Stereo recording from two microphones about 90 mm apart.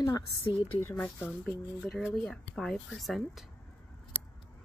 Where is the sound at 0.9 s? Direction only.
15° left (ahead or behind); by 3.4 s centre (ahead or behind).